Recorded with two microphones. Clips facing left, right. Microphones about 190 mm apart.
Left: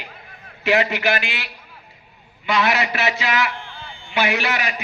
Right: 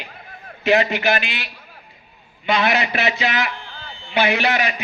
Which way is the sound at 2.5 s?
25° right (ahead or behind).